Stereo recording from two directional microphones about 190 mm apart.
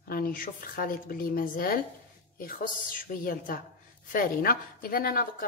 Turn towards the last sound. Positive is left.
turn(degrees=50)  # may be behind; listen again after turning